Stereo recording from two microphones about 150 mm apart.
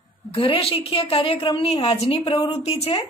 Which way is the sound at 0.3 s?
35° left (ahead or behind).